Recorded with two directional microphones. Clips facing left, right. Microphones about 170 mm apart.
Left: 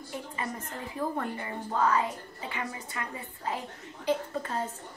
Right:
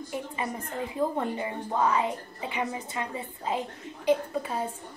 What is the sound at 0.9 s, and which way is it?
A woman's voice, 20° right (ahead or behind).